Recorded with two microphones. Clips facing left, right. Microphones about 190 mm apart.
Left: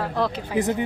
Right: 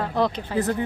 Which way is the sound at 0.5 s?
15° left (ahead or behind).